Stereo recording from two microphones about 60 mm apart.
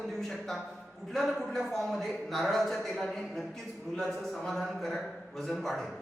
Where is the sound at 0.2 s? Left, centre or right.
Centre.